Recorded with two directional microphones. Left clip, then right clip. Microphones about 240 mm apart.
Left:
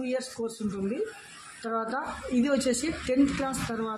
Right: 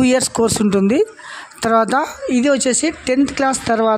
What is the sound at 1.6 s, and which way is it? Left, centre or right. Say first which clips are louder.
Speech: right 16 dB; right.